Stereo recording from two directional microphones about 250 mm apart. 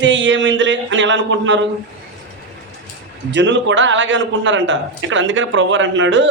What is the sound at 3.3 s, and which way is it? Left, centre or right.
A man's voice, right.